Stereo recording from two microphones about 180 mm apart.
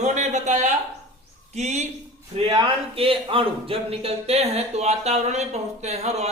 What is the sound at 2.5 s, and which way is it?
Speech, 25° right (ahead or behind).